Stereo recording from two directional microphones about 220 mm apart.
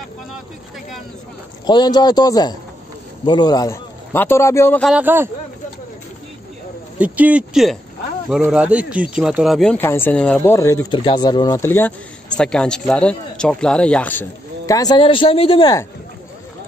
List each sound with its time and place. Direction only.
1.7 s speech: 20° left (ahead or behind)
4.9 s speech: 10° right (ahead or behind)
7.0 s speech: 5° right (ahead or behind)
14.7 s speech: 15° left (ahead or behind)